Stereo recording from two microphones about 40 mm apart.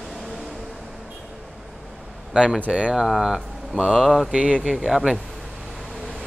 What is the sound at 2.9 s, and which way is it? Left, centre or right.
Speech, centre.